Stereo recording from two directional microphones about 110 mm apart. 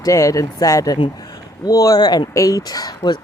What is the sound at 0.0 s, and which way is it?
Speech, 30° left (ahead or behind).